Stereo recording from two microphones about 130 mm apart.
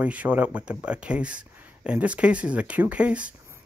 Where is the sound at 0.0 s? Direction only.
10° right (ahead or behind).